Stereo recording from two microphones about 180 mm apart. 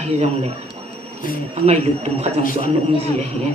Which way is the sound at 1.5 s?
35° right (ahead or behind).